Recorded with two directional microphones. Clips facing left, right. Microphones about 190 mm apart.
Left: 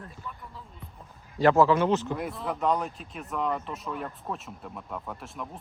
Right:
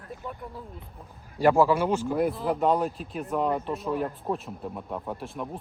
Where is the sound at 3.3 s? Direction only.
30° right (ahead or behind).